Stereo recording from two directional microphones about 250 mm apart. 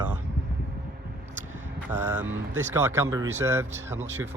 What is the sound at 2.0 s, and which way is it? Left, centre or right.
Speech, centre.